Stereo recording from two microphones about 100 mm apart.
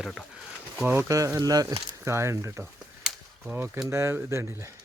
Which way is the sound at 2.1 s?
25° right (ahead or behind).